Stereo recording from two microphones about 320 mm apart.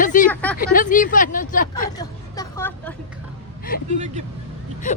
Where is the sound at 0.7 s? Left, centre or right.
Left.